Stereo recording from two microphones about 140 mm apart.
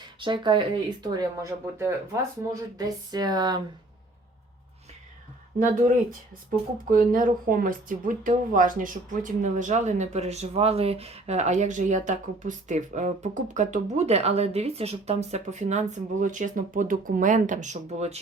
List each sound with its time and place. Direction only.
0.2 s speech: 35° right (ahead or behind)
5.5 s speech: 70° right (ahead or behind); by 18.2 s 55° right (ahead or behind)